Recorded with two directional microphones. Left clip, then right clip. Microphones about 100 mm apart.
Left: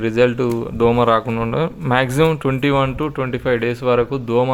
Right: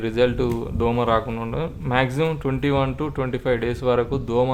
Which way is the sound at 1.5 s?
65° left (ahead or behind).